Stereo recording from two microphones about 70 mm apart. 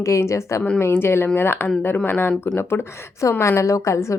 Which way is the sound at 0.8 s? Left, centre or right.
Left.